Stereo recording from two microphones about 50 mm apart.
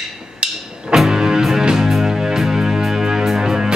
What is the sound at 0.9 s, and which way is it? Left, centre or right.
Music, centre.